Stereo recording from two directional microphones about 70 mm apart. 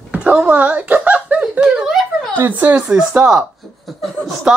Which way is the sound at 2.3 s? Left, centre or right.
Right.